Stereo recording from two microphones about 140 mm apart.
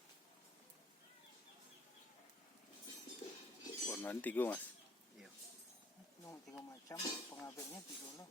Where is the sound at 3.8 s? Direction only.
15° left (ahead or behind).